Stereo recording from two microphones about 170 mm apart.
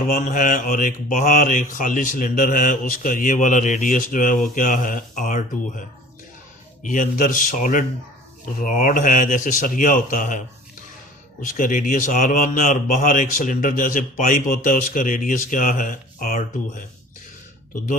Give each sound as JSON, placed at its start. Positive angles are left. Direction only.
{"t": 0.1, "sound": "mantra", "side_deg": 55}
{"t": 6.8, "sound": "mantra", "side_deg": 50}
{"t": 11.5, "sound": "mantra", "side_deg": 50}